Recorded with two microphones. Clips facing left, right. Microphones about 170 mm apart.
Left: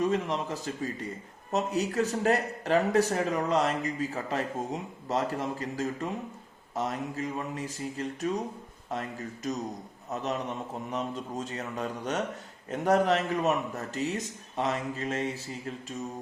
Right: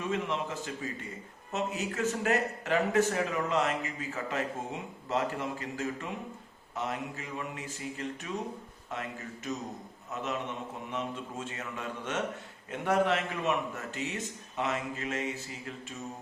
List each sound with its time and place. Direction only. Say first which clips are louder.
0.0 s speech: left 4 dB; 40° left (ahead or behind)
10.9 s speech: left 3 dB; 40° left (ahead or behind)